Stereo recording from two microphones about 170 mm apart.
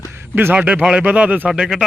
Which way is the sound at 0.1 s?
10° right (ahead or behind).